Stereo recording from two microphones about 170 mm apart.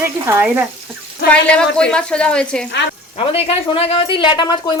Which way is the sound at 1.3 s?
5° left (ahead or behind).